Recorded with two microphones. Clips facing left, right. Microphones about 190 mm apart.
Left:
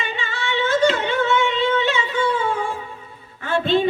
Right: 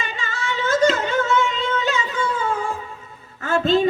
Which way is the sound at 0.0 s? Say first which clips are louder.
Left 1 dB; 40° right (ahead or behind).